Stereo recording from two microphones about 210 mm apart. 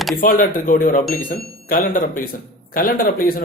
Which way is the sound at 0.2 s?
40° left (ahead or behind).